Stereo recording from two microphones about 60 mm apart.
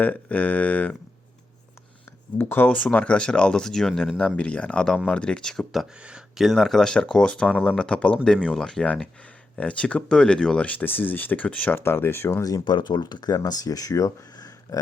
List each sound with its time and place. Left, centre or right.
0.0 s a sound: left
2.4 s speech: left; by 4.1 s centre
4.4 s a sound: centre
5.0 s speech: centre
6.0 s speech: centre
6.3 s speech: centre
8.8 s a sound: centre
9.6 s speech: centre
10.7 s speech: left
11.8 s speech: left
12.3 s speech: left